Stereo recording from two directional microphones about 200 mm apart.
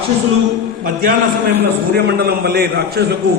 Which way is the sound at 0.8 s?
45° right (ahead or behind).